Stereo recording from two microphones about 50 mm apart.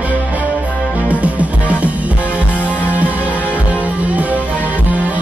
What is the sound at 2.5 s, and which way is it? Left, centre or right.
Music, left.